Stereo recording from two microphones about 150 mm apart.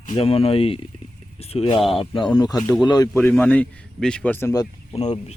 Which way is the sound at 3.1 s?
10° left (ahead or behind).